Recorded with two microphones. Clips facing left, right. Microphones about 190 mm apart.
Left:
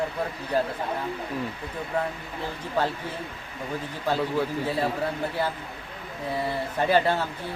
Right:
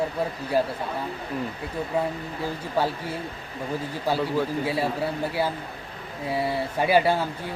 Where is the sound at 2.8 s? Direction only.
10° right (ahead or behind).